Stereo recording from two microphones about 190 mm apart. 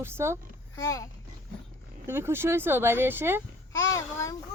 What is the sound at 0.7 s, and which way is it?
Speech, 15° left (ahead or behind).